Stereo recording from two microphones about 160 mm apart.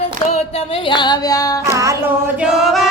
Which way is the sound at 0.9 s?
30° left (ahead or behind).